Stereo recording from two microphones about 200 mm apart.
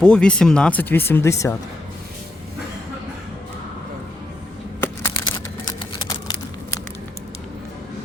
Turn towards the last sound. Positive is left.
turn(degrees=15)  # may be behind; listen again after turning